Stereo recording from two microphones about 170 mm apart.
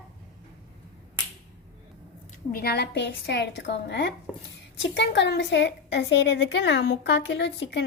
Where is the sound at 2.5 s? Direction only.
70° left (ahead or behind); by 7.9 s 90° left.